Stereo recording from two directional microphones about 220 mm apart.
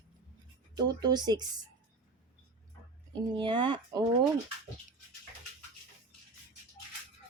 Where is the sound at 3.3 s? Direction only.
20° right (ahead or behind).